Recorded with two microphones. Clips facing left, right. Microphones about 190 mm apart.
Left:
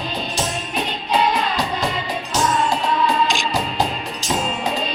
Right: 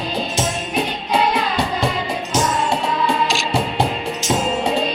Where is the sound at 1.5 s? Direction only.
25° right (ahead or behind).